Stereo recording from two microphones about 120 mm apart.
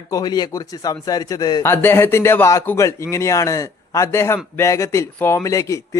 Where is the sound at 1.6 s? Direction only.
20° left (ahead or behind).